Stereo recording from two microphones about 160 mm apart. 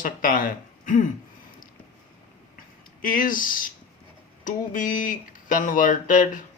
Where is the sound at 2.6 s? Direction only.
60° left (ahead or behind).